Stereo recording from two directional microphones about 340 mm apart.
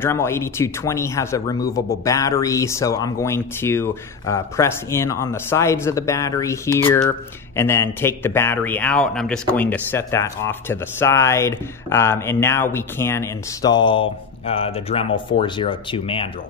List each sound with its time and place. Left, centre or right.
0.0 s speech: centre